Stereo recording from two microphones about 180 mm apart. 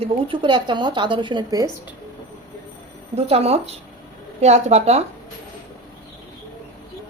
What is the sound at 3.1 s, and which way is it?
Speech, 35° right (ahead or behind).